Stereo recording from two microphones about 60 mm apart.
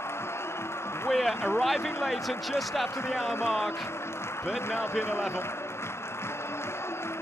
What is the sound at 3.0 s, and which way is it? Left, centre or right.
Speech, left.